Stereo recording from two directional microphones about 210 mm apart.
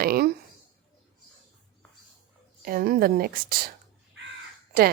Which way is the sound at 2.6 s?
45° right (ahead or behind).